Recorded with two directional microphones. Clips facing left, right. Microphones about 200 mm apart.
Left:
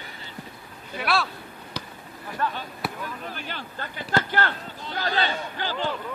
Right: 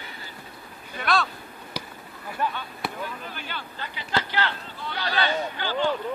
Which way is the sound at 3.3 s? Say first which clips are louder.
Left 1 dB; 40° left (ahead or behind).